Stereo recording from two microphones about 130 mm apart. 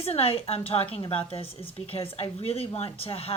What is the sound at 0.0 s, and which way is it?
A woman's voice, 45° left (ahead or behind).